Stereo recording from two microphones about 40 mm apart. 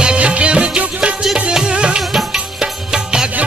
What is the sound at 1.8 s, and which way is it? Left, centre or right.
Music, right.